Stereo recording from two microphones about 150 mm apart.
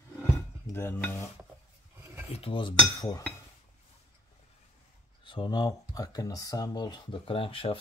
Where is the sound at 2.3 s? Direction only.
35° left (ahead or behind).